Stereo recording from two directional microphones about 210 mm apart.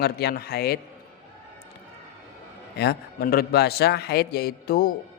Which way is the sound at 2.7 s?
50° left (ahead or behind).